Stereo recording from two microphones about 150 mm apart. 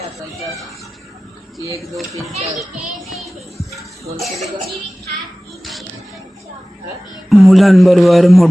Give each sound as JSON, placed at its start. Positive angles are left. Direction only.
{"t": 2.6, "sound": "music", "side_deg": 0}
{"t": 7.3, "sound": "a man's voice", "side_deg": 0}